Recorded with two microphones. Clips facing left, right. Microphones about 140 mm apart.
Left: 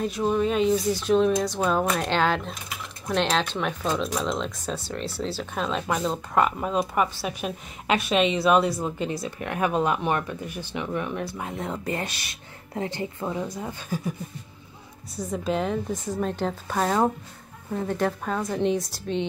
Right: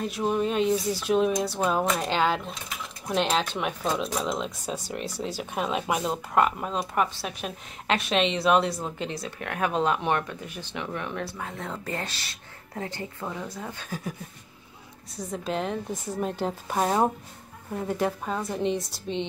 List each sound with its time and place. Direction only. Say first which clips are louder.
0.0 s speech: left 2 dB; 5° right (ahead or behind)
15.1 s speech: left 3 dB; centre (ahead or behind)
16.6 s speech: left 1 dB; 20° right (ahead or behind)
17.8 s speech: left 1 dB; 10° right (ahead or behind)